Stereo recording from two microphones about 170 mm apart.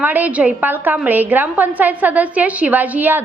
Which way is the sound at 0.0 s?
10° right (ahead or behind).